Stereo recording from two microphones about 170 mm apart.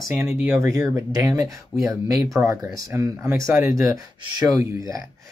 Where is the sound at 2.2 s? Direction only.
20° right (ahead or behind).